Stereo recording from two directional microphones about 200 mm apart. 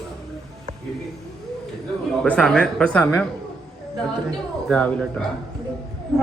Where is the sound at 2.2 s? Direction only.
5° left (ahead or behind).